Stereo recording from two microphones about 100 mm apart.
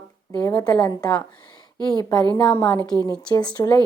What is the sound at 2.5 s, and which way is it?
Speech, 30° left (ahead or behind).